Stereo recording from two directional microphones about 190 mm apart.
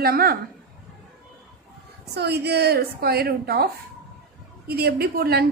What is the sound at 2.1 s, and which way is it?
A woman's voice, 60° right (ahead or behind).